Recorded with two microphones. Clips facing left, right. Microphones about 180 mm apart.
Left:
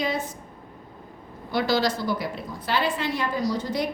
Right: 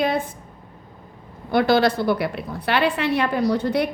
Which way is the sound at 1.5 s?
55° right (ahead or behind).